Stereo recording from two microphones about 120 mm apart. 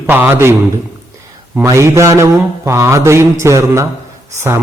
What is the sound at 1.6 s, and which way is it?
A man's voice, 25° right (ahead or behind).